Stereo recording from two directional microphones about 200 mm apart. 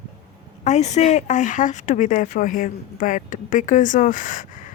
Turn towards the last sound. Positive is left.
turn(degrees=40)  # may be behind; listen again after turning